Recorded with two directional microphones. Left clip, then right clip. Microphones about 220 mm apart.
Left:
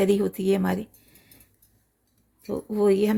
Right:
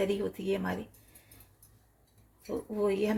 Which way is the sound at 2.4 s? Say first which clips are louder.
Left 9 dB; 50° left (ahead or behind).